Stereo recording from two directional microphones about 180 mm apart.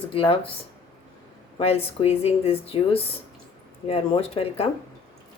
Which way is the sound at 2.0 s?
35° left (ahead or behind).